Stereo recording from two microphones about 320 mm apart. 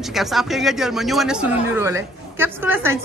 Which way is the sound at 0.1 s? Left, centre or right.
Centre.